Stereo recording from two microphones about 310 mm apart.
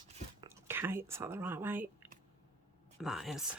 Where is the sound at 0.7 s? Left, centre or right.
Centre.